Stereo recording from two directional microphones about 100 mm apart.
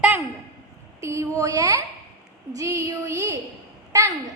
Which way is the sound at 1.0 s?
30° right (ahead or behind).